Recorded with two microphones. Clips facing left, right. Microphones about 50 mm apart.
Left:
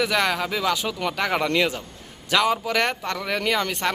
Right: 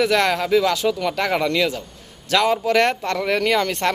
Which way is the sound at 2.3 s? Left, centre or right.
Centre.